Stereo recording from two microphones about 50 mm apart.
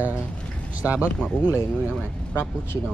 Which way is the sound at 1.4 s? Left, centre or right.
Right.